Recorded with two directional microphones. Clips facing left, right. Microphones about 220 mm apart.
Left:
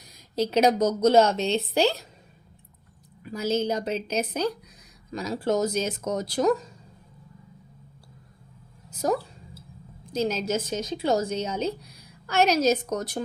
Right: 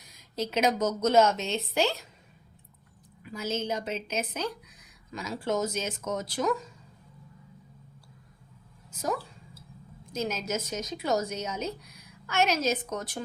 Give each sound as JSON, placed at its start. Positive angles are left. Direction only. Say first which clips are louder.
{"t": 0.3, "sound": "a woman's voice", "louder": "left 6 dB", "side_deg": 35}
{"t": 3.2, "sound": "a woman's voice", "louder": "left 6 dB", "side_deg": 35}
{"t": 8.9, "sound": "a sound", "louder": "left 6 dB", "side_deg": 35}
{"t": 10.1, "sound": "a woman's voice", "louder": "left 5 dB", "side_deg": 30}